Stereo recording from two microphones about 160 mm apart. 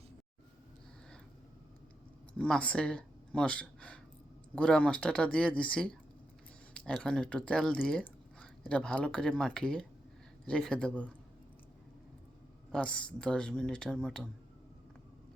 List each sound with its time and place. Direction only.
2.4 s speech: 5° left (ahead or behind)
12.7 s speech: 5° left (ahead or behind)